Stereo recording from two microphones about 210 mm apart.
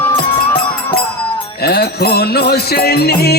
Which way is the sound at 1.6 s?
50° left (ahead or behind).